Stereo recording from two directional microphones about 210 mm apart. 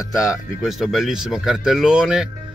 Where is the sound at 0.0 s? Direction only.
15° left (ahead or behind).